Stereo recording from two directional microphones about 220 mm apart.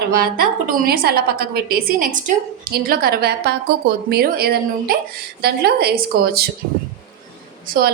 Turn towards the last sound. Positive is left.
turn(degrees=-45)  # may be behind; listen again after turning